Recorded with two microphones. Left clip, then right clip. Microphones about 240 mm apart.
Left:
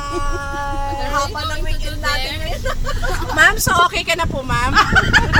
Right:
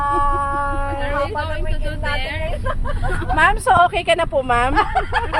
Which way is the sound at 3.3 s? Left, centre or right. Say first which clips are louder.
Left 1 dB; centre.